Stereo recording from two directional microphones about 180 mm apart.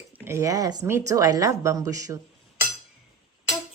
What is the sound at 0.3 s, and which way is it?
A woman's voice, 15° right (ahead or behind).